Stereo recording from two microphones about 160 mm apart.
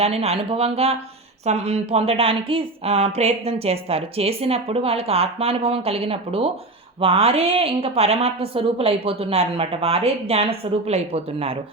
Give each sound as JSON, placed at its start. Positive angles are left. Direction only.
{"t": 0.0, "sound": "speech", "side_deg": -40}